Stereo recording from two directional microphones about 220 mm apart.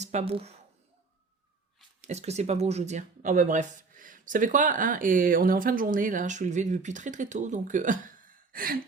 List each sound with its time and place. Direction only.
0.0 s speech: 30° right (ahead or behind)
2.0 s speech: 30° right (ahead or behind)